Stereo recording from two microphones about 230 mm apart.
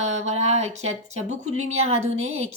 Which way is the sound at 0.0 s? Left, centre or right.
Right.